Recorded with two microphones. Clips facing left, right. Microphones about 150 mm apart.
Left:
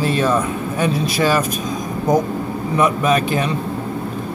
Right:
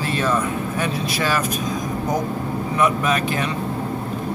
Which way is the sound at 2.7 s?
25° left (ahead or behind).